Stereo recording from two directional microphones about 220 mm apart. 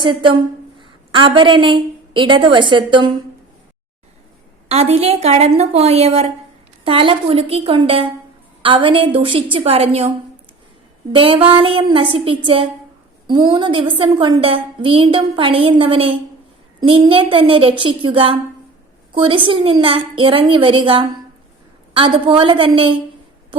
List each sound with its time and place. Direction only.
0.0 s a woman's voice: 20° right (ahead or behind)
4.7 s a woman's voice: 30° right (ahead or behind)
11.1 s a woman's voice: 25° right (ahead or behind)